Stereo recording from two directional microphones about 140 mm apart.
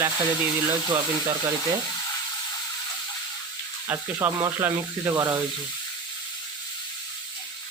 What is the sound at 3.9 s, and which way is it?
Speech, 15° right (ahead or behind).